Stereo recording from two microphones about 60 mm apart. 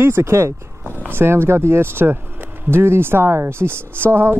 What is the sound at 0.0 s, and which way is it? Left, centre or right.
Speech, right.